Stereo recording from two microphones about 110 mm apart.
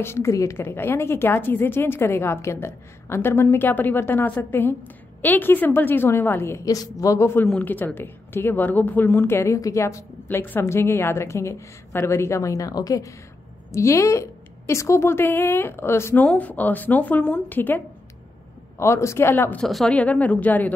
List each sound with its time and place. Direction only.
0.0 s a woman's voice: 25° left (ahead or behind)
19.6 s a woman's voice: 5° left (ahead or behind)